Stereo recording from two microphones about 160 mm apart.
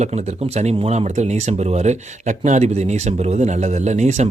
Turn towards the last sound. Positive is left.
turn(degrees=-45)  # may be behind; listen again after turning